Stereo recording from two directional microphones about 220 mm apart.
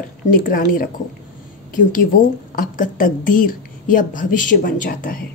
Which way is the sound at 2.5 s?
35° left (ahead or behind).